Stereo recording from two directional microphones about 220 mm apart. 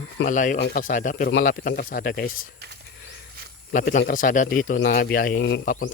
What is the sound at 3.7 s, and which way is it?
A man's voice, 35° left (ahead or behind).